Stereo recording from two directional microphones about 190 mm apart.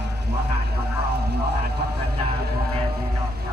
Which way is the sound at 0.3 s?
60° right (ahead or behind).